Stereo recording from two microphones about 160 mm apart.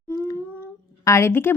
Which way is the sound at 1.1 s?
15° left (ahead or behind).